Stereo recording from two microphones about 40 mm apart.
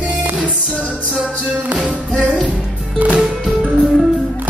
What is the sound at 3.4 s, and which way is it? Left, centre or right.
Music, centre.